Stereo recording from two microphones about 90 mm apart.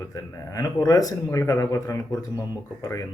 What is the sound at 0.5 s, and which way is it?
Speech, 40° left (ahead or behind).